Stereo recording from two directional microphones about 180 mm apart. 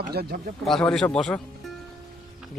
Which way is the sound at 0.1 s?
60° right (ahead or behind).